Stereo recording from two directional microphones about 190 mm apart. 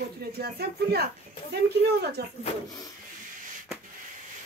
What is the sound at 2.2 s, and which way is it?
Speech, 60° right (ahead or behind).